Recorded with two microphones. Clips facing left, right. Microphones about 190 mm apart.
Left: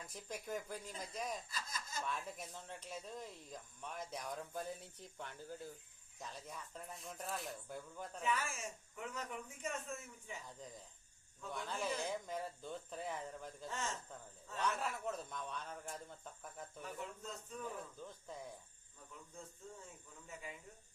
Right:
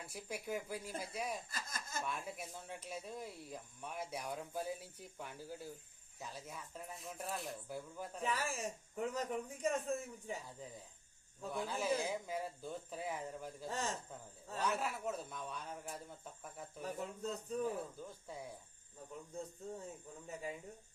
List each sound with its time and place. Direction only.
0.0 s speech: 10° right (ahead or behind)
1.5 s snicker: 50° right (ahead or behind)
2.0 s speech: 10° right (ahead or behind)
8.2 s speech: 35° right (ahead or behind)
11.5 s speech: 10° right (ahead or behind)
13.7 s speech: 35° right (ahead or behind)
14.6 s speech: 5° right (ahead or behind)
16.8 s speech: 35° right (ahead or behind)
19.3 s speech: 35° right (ahead or behind)